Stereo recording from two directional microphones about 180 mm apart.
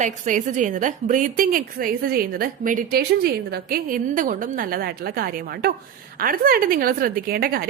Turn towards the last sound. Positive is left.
turn(degrees=-55)  # may be behind; listen again after turning